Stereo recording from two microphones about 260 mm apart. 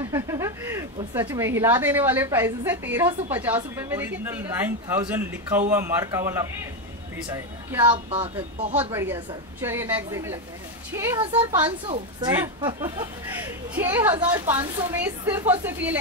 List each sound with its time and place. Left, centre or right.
0.1 s speech: centre